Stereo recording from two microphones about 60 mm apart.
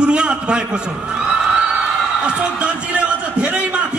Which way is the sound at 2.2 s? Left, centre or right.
Right.